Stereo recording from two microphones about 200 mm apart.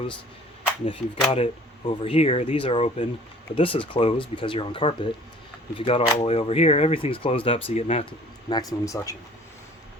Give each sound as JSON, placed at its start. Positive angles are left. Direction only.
{"t": 0.9, "sound": "speech", "side_deg": 25}
{"t": 8.4, "sound": "speech", "side_deg": 20}